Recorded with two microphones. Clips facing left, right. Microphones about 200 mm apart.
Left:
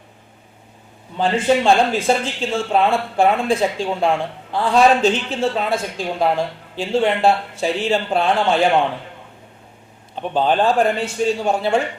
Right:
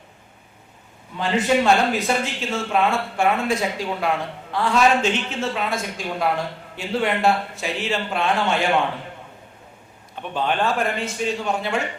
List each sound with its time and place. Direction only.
1.2 s a man's voice: 30° left (ahead or behind)
10.2 s a man's voice: 30° left (ahead or behind)